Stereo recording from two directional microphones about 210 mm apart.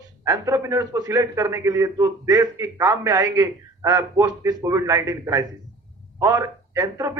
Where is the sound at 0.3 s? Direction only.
15° right (ahead or behind).